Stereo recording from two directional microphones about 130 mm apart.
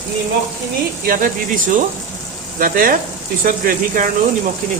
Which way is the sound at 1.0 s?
90° right.